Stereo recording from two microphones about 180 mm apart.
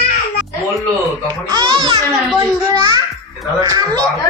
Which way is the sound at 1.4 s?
25° right (ahead or behind).